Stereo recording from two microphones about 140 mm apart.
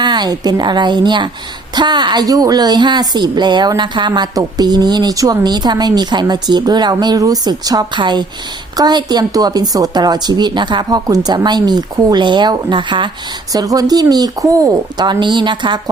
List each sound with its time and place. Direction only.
0.0 s a woman's voice: 30° right (ahead or behind)